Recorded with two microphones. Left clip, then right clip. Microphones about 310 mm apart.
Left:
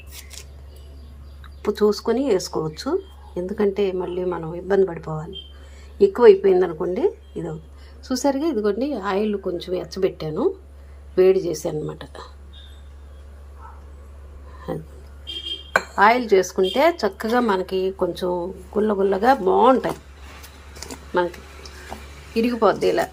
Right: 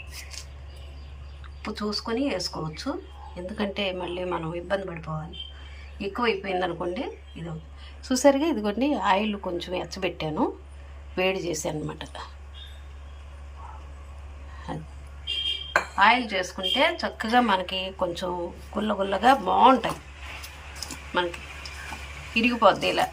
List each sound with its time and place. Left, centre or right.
1.6 s a woman's voice: centre
14.7 s a sound: centre
16.0 s a woman's voice: centre
22.4 s a woman's voice: centre